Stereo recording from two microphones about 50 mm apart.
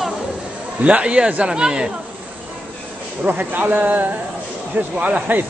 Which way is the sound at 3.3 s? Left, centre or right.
Right.